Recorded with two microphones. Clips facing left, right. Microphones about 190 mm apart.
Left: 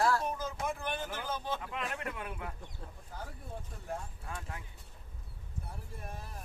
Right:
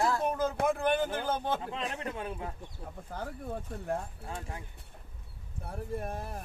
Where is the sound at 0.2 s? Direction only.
55° right (ahead or behind).